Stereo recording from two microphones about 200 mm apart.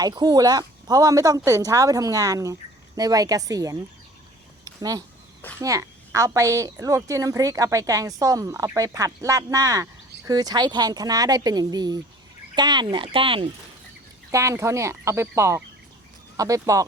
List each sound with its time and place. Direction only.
0.0 s a woman's voice: 20° right (ahead or behind)
4.6 s a sound: 20° right (ahead or behind)
5.5 s a woman's voice: 15° right (ahead or behind)
14.3 s a woman's voice: 15° right (ahead or behind)